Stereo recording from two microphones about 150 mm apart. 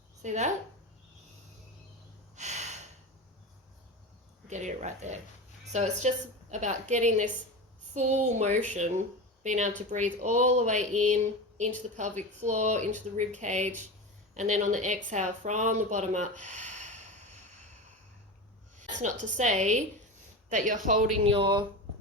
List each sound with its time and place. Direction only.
0.2 s speech: 50° right (ahead or behind)
2.3 s gasp: 50° right (ahead or behind)
4.4 s speech: 50° right (ahead or behind)
18.8 s a woman's voice: 55° right (ahead or behind)
21.2 s speech: 35° right (ahead or behind)